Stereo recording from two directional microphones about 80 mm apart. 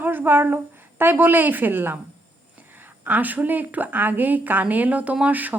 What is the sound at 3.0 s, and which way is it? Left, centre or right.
A woman's voice, right.